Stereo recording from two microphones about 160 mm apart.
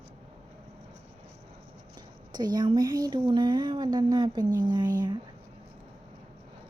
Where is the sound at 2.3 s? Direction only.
25° right (ahead or behind).